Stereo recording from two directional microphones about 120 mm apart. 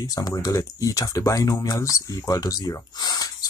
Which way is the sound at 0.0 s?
30° left (ahead or behind).